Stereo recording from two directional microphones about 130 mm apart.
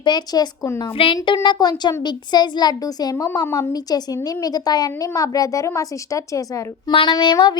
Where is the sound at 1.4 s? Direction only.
30° left (ahead or behind).